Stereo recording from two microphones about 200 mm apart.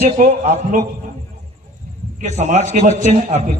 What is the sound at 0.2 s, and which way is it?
Speech, 35° right (ahead or behind).